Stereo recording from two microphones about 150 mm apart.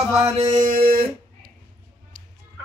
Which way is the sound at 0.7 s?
40° right (ahead or behind).